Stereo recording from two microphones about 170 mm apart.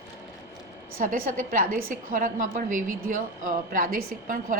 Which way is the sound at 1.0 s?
50° right (ahead or behind).